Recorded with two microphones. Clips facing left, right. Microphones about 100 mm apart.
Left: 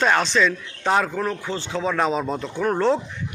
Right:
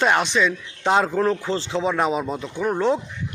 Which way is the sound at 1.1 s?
30° right (ahead or behind).